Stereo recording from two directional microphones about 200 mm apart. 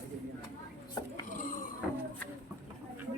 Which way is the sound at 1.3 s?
45° left (ahead or behind).